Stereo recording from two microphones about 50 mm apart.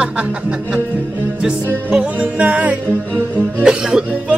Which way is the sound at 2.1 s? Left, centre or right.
Right.